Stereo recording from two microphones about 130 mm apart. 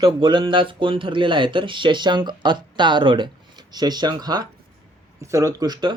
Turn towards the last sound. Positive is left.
turn(degrees=-35)  # may be behind; listen again after turning